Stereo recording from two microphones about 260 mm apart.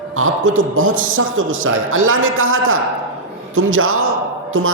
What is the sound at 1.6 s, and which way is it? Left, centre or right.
Speech, right.